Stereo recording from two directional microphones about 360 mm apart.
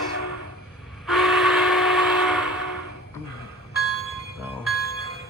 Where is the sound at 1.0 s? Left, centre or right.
Centre.